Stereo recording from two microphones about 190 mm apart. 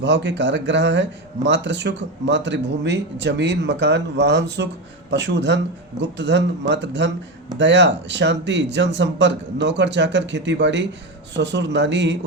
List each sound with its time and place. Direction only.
0.0 s speech: 70° right (ahead or behind)